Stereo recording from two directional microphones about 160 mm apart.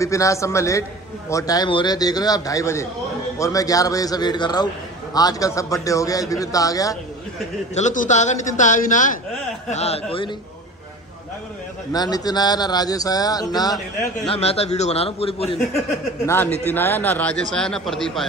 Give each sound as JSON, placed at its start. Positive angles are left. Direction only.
{"t": 0.0, "sound": "speech", "side_deg": 20}
{"t": 7.7, "sound": "a man's voice", "side_deg": 50}
{"t": 9.7, "sound": "a man's voice", "side_deg": 40}
{"t": 11.9, "sound": "speech", "side_deg": 25}
{"t": 14.2, "sound": "a man's voice", "side_deg": 40}
{"t": 16.3, "sound": "a man's voice", "side_deg": 10}